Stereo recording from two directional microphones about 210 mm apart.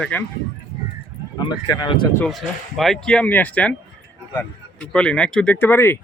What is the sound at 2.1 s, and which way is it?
Speech, 5° left (ahead or behind).